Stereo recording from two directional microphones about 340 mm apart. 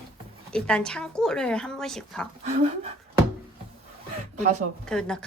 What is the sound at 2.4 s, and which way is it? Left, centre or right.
Speech, centre.